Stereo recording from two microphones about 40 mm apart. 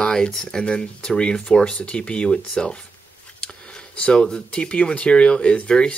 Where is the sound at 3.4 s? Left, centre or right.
Left.